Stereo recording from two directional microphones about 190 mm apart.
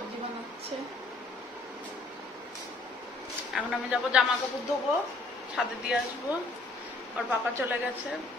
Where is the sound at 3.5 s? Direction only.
5° right (ahead or behind).